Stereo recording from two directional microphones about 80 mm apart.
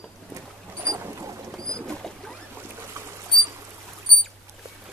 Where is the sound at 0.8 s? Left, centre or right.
Right.